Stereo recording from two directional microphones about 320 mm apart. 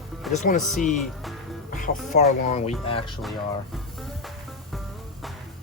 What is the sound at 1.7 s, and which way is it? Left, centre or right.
Music, left.